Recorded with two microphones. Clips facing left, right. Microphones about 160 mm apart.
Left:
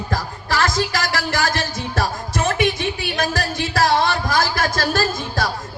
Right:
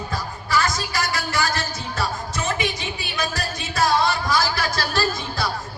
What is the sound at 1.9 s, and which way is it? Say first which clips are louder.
Music: left 4 dB; 55° left (ahead or behind).